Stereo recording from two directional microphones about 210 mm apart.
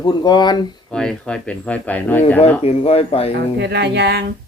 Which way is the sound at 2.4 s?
30° left (ahead or behind).